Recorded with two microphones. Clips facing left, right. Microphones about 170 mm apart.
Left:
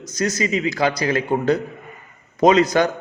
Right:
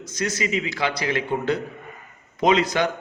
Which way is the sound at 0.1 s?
40° left (ahead or behind).